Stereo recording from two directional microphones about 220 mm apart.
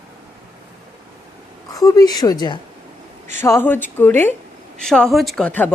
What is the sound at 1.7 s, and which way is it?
A woman's voice, 15° left (ahead or behind).